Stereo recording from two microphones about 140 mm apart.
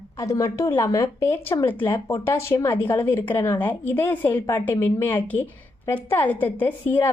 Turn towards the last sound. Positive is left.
turn(degrees=15)  # may be behind; listen again after turning